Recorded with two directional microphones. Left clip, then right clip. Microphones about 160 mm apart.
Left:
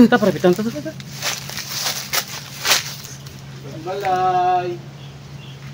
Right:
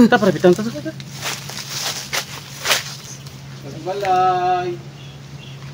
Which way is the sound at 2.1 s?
75° left (ahead or behind).